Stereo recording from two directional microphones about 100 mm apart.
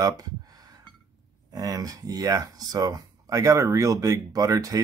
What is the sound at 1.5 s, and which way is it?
Speech, 40° right (ahead or behind).